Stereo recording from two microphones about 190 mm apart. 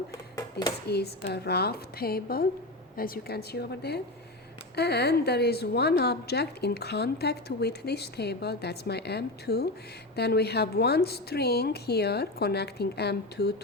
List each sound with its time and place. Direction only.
0.9 s a woman's voice: 60° left (ahead or behind)